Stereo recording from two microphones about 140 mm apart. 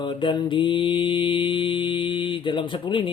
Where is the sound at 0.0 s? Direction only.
35° left (ahead or behind).